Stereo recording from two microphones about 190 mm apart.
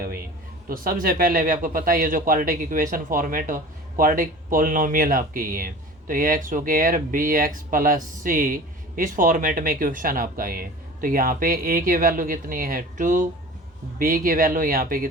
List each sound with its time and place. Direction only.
0.7 s speech: 50° right (ahead or behind)